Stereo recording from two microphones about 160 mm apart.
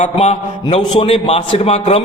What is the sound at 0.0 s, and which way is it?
A man's voice, 45° left (ahead or behind).